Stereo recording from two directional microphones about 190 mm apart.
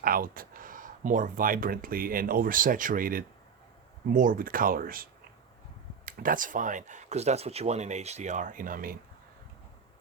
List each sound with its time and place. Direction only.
0.0 s speech: 50° right (ahead or behind)
6.1 s speech: 50° right (ahead or behind)